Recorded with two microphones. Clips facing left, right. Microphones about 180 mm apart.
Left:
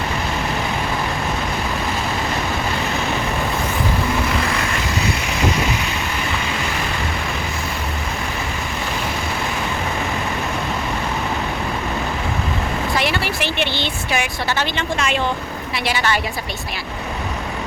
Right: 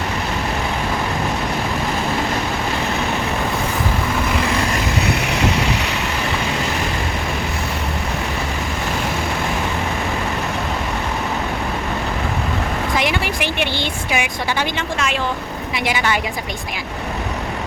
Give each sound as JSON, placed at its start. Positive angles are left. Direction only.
{"t": 13.0, "sound": "a sound", "side_deg": -15}
{"t": 14.9, "sound": "speech", "side_deg": 0}
{"t": 15.7, "sound": "a woman's voice", "side_deg": -15}